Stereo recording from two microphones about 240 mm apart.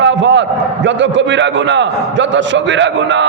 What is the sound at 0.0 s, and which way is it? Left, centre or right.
A man's voice, right.